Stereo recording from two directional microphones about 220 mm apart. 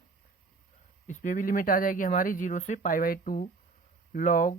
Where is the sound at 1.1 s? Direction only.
35° left (ahead or behind).